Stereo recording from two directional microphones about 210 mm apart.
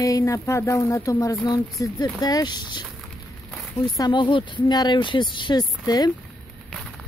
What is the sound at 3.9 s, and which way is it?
Speech, 20° left (ahead or behind).